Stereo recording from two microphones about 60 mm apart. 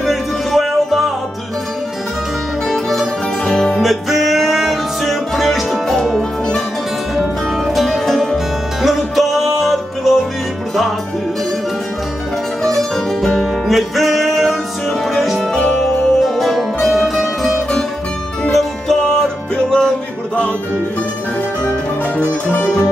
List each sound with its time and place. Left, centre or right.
0.0 s music: centre
2.7 s music: centre
7.6 s music: centre
12.6 s music: centre
22.5 s music: left